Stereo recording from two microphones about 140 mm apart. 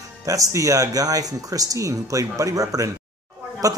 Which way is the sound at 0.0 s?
25° right (ahead or behind).